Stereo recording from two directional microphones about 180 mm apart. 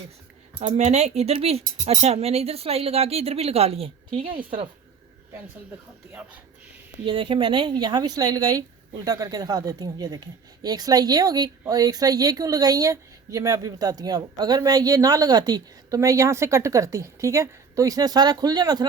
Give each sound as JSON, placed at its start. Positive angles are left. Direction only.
{"t": 0.6, "sound": "speech", "side_deg": -40}
{"t": 7.0, "sound": "speech", "side_deg": -30}